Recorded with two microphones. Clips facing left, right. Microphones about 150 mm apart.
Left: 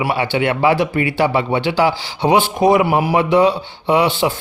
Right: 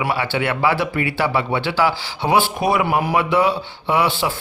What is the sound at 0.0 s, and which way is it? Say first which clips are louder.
Speech: left 3 dB; 20° left (ahead or behind).